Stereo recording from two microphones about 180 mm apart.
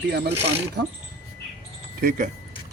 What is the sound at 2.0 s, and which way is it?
Speech, 50° right (ahead or behind).